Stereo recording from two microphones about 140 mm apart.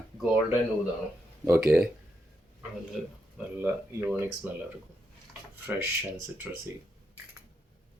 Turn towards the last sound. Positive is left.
turn(degrees=-10)  # may be behind; listen again after turning